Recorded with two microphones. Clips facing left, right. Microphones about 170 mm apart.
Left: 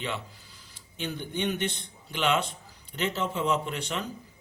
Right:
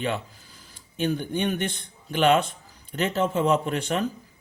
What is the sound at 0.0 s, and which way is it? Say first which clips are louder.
Speech: right 6 dB; 45° right (ahead or behind).